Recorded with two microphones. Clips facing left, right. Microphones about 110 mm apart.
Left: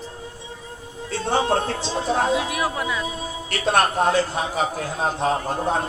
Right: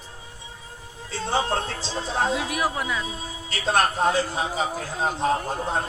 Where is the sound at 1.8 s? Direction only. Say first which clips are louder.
Left 5 dB; 60° left (ahead or behind).